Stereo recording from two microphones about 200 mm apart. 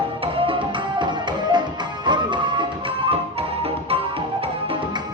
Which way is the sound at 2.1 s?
25° right (ahead or behind).